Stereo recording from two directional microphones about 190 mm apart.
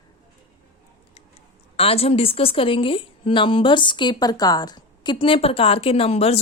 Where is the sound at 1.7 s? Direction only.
30° left (ahead or behind).